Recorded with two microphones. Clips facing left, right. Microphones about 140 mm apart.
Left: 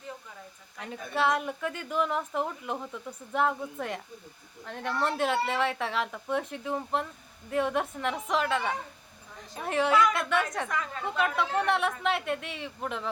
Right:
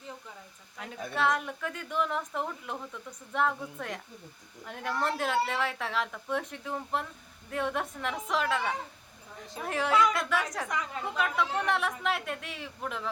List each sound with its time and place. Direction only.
0.8 s a woman's voice: centre (ahead or behind)
10.7 s a woman's voice: 15° right (ahead or behind)
11.2 s a woman's voice: centre (ahead or behind)